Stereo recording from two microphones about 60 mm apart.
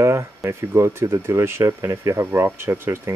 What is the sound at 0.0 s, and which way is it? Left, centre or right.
Speech, right.